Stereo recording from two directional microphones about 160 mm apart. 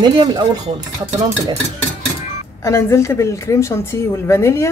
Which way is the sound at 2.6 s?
15° left (ahead or behind).